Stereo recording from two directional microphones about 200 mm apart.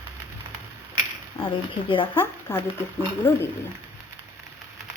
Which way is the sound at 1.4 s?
25° left (ahead or behind).